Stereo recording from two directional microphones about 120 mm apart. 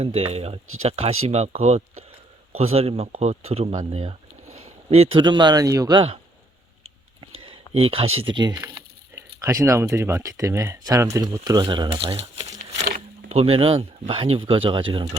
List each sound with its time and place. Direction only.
0.0 s a man's voice: 55° right (ahead or behind); by 6.0 s 30° right (ahead or behind)
7.2 s a sound: 50° right (ahead or behind)
8.5 s speech: 20° right (ahead or behind); by 11.9 s 35° right (ahead or behind)
11.9 s crumpling: 50° right (ahead or behind)
13.3 s speech: 55° right (ahead or behind)